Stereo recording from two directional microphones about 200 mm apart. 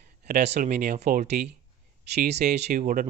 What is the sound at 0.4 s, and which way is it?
Speech, 35° right (ahead or behind).